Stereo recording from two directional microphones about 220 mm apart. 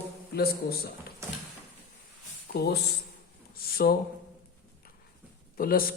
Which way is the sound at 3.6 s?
45° left (ahead or behind).